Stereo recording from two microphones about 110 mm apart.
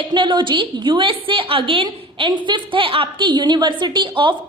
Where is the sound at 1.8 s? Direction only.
40° right (ahead or behind).